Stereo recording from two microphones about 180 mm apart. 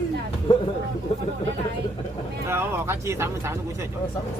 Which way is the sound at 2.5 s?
15° right (ahead or behind).